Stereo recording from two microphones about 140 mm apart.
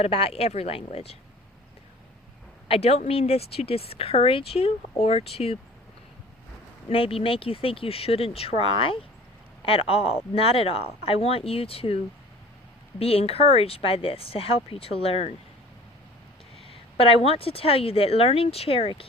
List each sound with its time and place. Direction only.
0.0 s speech: 45° left (ahead or behind)
2.6 s speech: 45° left (ahead or behind)
6.8 s speech: 40° left (ahead or behind)
13.0 s speech: 45° left (ahead or behind)
17.0 s speech: 40° left (ahead or behind)